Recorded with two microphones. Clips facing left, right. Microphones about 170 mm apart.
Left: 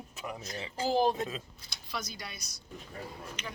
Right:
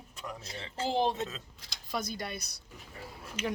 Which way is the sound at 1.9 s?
50° right (ahead or behind).